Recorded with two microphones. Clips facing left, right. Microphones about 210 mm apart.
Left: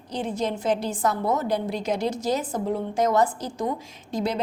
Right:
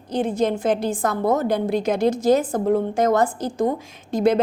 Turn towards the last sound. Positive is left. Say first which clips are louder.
# right 8 dB
turn(degrees=-50)  # may be behind; listen again after turning